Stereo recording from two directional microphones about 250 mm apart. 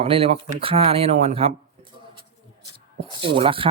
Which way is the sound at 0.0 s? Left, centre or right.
Right.